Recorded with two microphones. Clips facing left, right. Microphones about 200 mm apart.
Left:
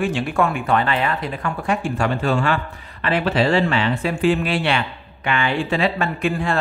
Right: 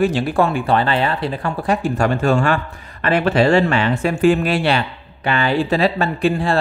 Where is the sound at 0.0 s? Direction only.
35° right (ahead or behind).